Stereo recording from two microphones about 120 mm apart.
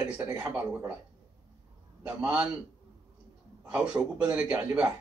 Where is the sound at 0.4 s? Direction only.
15° right (ahead or behind).